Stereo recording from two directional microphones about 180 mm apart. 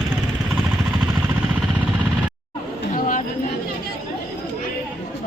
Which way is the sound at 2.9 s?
45° left (ahead or behind).